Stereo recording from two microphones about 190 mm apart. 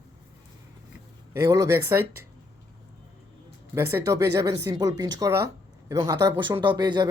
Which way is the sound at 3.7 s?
15° right (ahead or behind).